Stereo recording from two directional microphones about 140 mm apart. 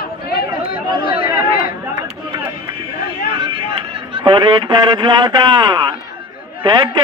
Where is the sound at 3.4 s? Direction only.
35° right (ahead or behind).